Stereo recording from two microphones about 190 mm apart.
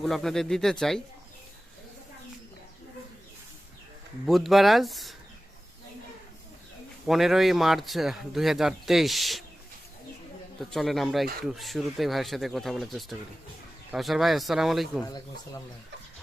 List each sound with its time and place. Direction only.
0.0 s speech: centre (ahead or behind)
4.3 s speech: centre (ahead or behind)
7.1 s speech: centre (ahead or behind)
10.6 s speech: centre (ahead or behind)
15.0 s speech: 20° left (ahead or behind)